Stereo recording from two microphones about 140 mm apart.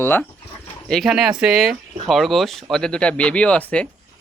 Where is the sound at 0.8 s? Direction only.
Centre (ahead or behind).